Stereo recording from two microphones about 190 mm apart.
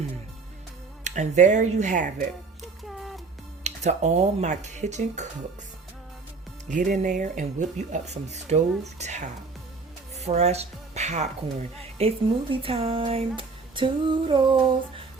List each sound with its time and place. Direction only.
1.0 s speech: 40° right (ahead or behind)
2.8 s music: centre (ahead or behind)
3.6 s speech: 35° right (ahead or behind)
6.7 s speech: 40° right (ahead or behind)